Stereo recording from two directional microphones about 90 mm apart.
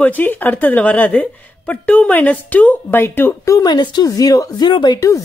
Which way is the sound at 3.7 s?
55° left (ahead or behind).